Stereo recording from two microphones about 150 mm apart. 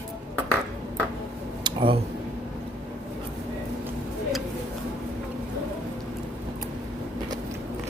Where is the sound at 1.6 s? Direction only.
35° right (ahead or behind).